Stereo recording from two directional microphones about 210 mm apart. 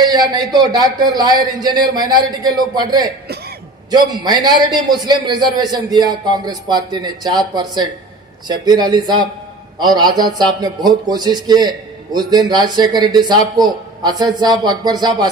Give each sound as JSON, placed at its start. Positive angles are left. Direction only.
{"t": 0.0, "sound": "a man's voice", "side_deg": -20}